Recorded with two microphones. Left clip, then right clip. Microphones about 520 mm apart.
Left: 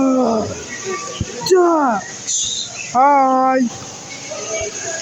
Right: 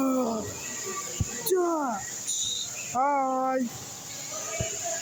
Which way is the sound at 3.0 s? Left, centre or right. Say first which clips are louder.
Left 13 dB; right.